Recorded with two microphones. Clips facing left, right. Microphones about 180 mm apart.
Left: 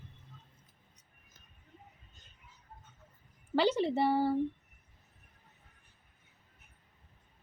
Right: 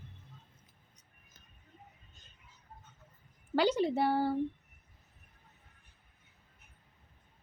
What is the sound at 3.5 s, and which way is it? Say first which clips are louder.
Speech: even; 5° left (ahead or behind).